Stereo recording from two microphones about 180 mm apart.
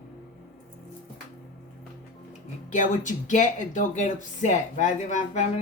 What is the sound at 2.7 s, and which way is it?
Speech, 45° left (ahead or behind).